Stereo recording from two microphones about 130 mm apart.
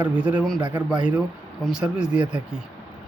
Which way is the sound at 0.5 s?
35° right (ahead or behind).